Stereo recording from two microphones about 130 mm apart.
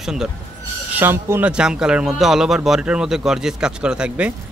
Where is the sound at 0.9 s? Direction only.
15° right (ahead or behind).